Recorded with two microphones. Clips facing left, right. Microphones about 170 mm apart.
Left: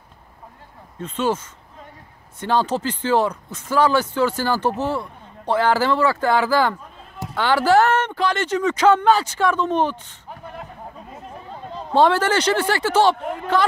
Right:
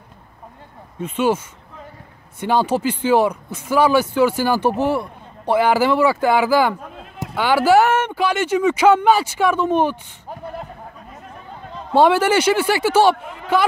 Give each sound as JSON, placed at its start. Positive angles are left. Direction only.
{"t": 0.9, "sound": "speech", "side_deg": -10}
{"t": 2.4, "sound": "speech", "side_deg": -10}
{"t": 11.9, "sound": "speech", "side_deg": -10}